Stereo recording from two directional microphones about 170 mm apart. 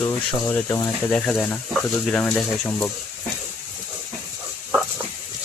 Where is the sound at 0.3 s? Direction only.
15° left (ahead or behind).